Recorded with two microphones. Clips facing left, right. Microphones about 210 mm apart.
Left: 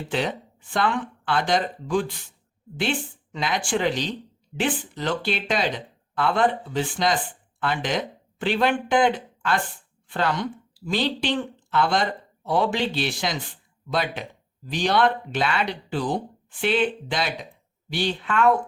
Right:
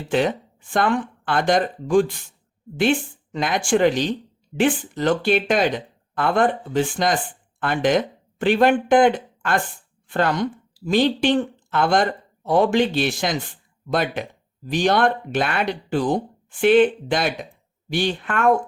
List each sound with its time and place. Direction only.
0.1 s speech: 50° right (ahead or behind)